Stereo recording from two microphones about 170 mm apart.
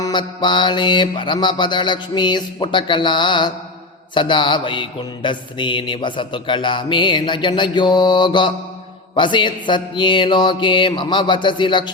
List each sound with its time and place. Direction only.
0.0 s mantra: 25° left (ahead or behind)